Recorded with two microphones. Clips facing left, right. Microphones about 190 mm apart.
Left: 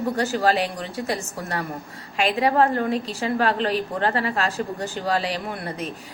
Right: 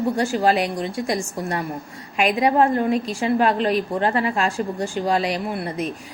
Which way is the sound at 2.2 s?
35° left (ahead or behind).